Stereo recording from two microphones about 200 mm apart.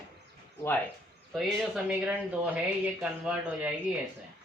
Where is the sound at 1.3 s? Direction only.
Centre (ahead or behind).